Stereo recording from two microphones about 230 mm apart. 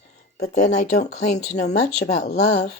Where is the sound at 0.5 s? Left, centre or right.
Left.